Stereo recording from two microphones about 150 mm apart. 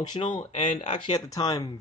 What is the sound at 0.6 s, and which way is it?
Speech, 55° left (ahead or behind).